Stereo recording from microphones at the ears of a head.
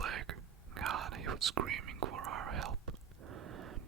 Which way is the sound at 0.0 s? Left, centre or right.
Right.